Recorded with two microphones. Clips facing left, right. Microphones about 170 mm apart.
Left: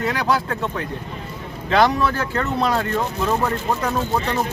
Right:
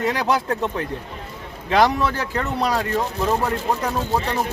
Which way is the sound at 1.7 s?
15° right (ahead or behind).